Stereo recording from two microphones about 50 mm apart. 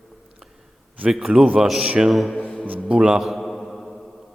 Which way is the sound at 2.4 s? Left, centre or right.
Left.